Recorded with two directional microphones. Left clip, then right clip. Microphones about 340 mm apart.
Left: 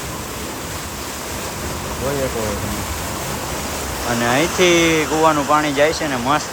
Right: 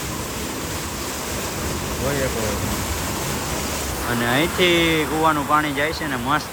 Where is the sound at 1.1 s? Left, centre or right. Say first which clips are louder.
Left 1 dB; centre.